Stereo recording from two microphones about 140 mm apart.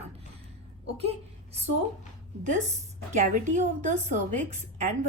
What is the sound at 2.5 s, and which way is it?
A woman's voice, 55° right (ahead or behind).